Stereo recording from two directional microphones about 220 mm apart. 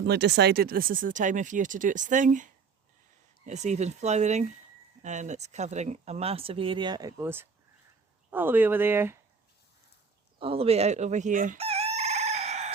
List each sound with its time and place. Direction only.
0.0 s speech: 50° right (ahead or behind); by 9.1 s 10° right (ahead or behind)
10.4 s chicken: 25° right (ahead or behind)